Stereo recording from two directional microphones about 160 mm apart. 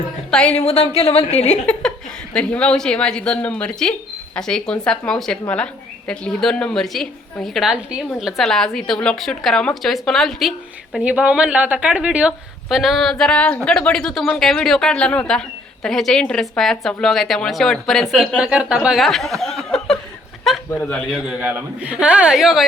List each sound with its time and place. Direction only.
0.3 s a woman's voice: 5° left (ahead or behind)
0.5 s a woman's voice: 40° left (ahead or behind)
2.3 s a woman's voice: 5° left (ahead or behind)